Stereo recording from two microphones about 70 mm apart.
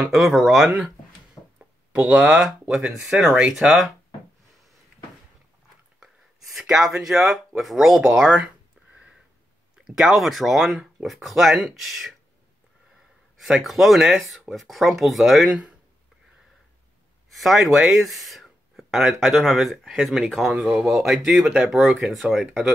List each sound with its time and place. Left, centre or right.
0.0 s speech: centre
1.4 s a sound: left
2.0 s speech: centre
5.9 s a sound: centre
7.0 s speech: centre
9.8 s speech: centre
13.4 s speech: centre
17.3 s speech: centre